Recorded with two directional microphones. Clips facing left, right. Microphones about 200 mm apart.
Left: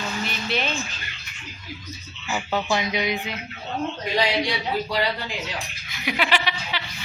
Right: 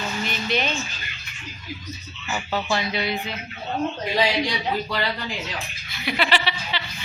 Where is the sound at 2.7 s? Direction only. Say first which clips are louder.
Even; 15° left (ahead or behind).